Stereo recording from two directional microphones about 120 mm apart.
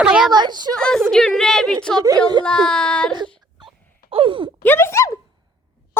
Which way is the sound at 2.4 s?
5° left (ahead or behind).